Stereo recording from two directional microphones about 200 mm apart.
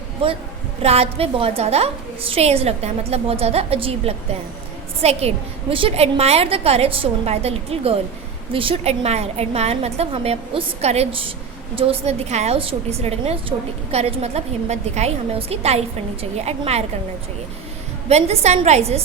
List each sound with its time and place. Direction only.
0.2 s a woman's voice: 25° right (ahead or behind)
18.1 s a woman's voice: 35° right (ahead or behind)